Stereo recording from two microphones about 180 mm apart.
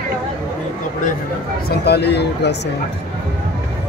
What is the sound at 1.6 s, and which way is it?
Speech, 65° left (ahead or behind).